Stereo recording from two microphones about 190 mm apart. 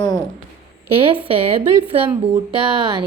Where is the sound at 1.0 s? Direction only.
30° right (ahead or behind).